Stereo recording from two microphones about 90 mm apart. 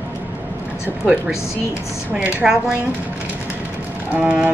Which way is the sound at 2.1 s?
15° right (ahead or behind).